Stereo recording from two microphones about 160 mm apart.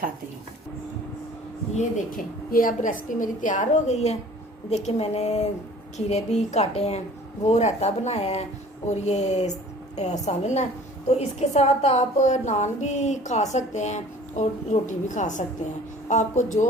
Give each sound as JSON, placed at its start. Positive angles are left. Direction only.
{"t": 1.7, "sound": "a woman's voice", "side_deg": 60}